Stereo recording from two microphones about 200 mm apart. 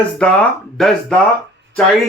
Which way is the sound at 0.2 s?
5° left (ahead or behind).